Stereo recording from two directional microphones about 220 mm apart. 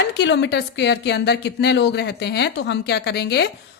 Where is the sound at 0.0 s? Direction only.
50° left (ahead or behind).